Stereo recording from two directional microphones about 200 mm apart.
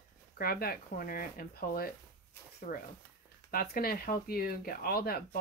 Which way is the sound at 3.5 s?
50° left (ahead or behind).